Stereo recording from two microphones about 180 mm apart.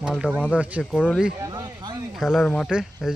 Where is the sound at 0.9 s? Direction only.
5° left (ahead or behind).